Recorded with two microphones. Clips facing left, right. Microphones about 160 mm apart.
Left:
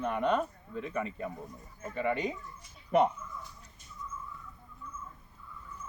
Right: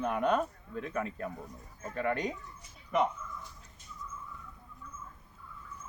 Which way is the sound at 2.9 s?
30° left (ahead or behind).